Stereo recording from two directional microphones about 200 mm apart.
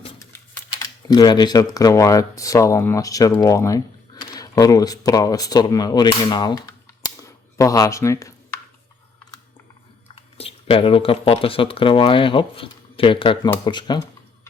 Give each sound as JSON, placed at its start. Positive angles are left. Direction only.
{"t": 0.3, "sound": "speech", "side_deg": 15}
{"t": 10.2, "sound": "speech", "side_deg": 30}